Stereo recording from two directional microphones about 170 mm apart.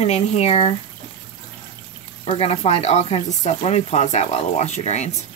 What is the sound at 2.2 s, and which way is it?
Speech, 35° left (ahead or behind).